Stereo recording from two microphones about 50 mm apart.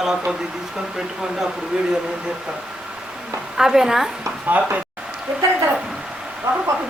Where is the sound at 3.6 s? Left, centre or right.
Centre.